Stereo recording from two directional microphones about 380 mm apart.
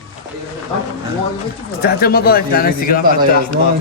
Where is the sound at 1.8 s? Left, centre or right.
Left.